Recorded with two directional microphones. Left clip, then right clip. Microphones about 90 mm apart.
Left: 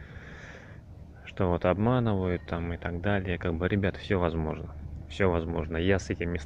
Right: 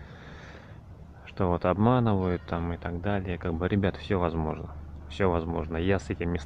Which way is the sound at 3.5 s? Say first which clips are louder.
Right 3 dB; 25° right (ahead or behind).